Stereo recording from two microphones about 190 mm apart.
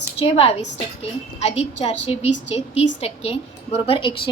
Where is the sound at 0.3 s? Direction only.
30° left (ahead or behind).